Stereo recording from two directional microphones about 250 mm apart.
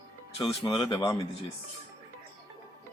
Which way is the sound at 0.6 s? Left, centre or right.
Centre.